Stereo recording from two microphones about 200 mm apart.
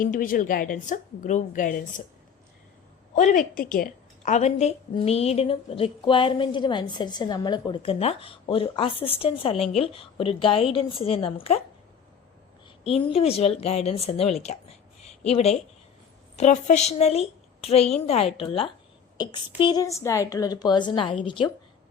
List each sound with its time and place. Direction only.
0.0 s a woman's voice: 45° left (ahead or behind)
3.2 s a woman's voice: 40° left (ahead or behind)
13.1 s a woman's voice: 30° left (ahead or behind)